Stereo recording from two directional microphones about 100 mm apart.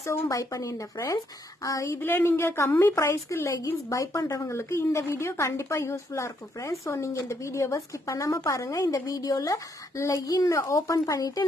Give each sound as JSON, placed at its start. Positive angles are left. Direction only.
{"t": 0.0, "sound": "a woman's voice", "side_deg": 30}
{"t": 2.0, "sound": "a woman's voice", "side_deg": 20}